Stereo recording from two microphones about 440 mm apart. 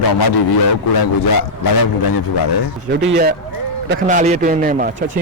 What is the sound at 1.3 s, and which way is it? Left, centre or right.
Speech, left.